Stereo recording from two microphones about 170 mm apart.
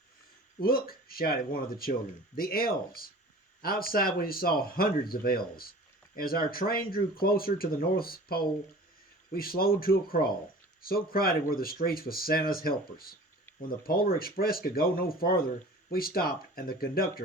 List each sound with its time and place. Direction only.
0.6 s speech: 60° left (ahead or behind)